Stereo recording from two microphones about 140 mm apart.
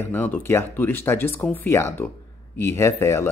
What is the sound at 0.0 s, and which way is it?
Speech, 15° left (ahead or behind).